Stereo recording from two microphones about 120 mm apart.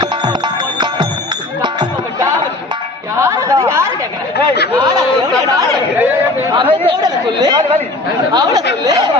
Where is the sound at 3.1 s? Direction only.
25° right (ahead or behind).